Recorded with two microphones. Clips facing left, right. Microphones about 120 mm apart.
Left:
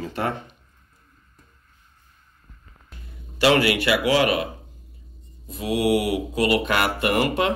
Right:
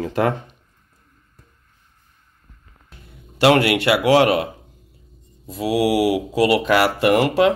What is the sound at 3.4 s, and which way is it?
Speech, 65° right (ahead or behind).